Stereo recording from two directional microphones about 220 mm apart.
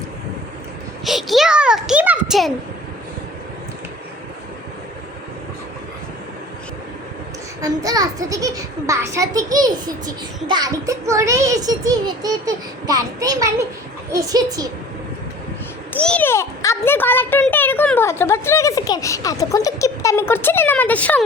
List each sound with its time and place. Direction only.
1.0 s a sound: centre (ahead or behind)
7.6 s a child's voice: 15° right (ahead or behind)
15.9 s a child's voice: 5° left (ahead or behind)